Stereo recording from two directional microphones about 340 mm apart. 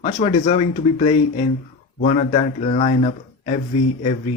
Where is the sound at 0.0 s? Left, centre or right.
Centre.